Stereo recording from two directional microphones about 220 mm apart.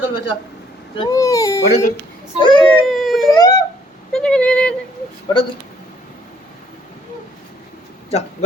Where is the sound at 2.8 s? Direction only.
Centre (ahead or behind).